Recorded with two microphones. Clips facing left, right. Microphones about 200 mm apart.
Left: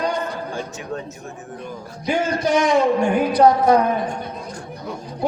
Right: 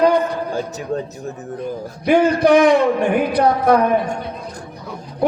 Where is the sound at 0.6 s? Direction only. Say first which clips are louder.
Right 6 dB; 35° right (ahead or behind).